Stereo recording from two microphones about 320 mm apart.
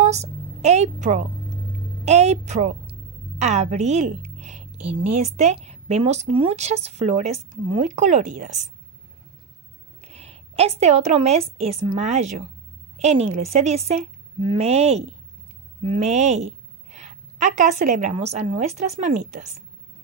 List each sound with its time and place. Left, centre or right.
0.0 s a woman's voice: right
4.4 s a sound: right
5.0 s speech: right
10.0 s a woman's voice: centre